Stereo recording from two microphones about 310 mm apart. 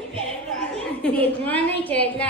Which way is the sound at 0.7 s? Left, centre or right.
Centre.